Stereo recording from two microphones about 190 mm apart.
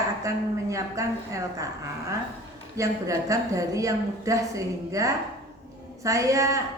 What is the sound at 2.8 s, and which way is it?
A woman's voice, 15° right (ahead or behind).